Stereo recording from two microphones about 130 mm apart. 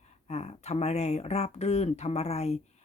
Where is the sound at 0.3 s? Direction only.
55° left (ahead or behind).